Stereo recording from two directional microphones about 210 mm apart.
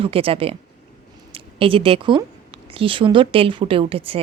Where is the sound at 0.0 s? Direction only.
25° right (ahead or behind).